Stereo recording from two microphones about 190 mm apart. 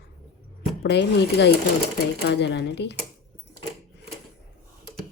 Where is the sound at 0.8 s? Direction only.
65° left (ahead or behind).